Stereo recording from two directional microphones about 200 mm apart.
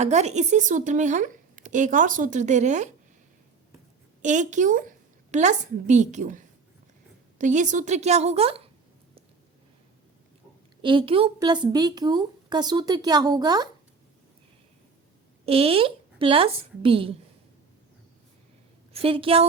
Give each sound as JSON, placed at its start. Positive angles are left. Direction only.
{"t": 0.0, "sound": "a woman's voice", "side_deg": -35}
{"t": 4.2, "sound": "a woman's voice", "side_deg": -40}
{"t": 10.8, "sound": "a woman's voice", "side_deg": -25}
{"t": 15.4, "sound": "a woman's voice", "side_deg": -30}
{"t": 18.9, "sound": "a woman's voice", "side_deg": -25}